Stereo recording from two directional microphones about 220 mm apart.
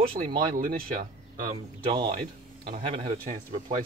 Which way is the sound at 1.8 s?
20° right (ahead or behind).